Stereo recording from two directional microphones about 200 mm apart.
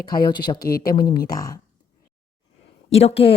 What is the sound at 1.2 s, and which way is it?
Speech, 20° left (ahead or behind).